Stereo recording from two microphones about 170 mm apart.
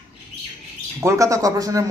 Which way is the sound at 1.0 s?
15° right (ahead or behind).